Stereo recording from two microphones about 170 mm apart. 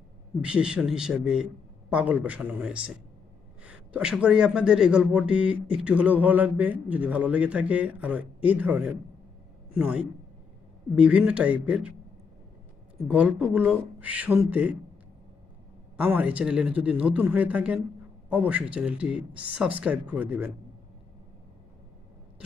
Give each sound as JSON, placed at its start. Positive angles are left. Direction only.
{"t": 0.4, "sound": "a man's voice", "side_deg": -5}
{"t": 13.1, "sound": "a man's voice", "side_deg": -10}
{"t": 16.0, "sound": "a man's voice", "side_deg": -10}